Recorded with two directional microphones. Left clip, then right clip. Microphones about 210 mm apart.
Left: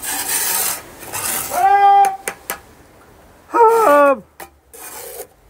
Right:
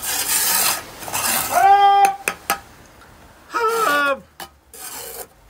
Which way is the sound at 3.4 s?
15° left (ahead or behind).